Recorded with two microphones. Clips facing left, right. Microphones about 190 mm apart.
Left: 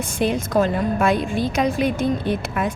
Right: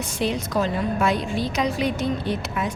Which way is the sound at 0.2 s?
50° left (ahead or behind).